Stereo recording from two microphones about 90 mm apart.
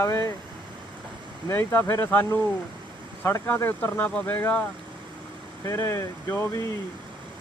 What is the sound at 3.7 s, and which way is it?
Speech, 20° left (ahead or behind).